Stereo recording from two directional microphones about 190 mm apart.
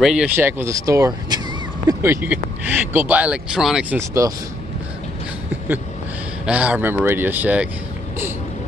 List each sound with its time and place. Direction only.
0.0 s speech: 5° right (ahead or behind)
4.2 s speech: 20° right (ahead or behind)
6.4 s speech: 5° right (ahead or behind)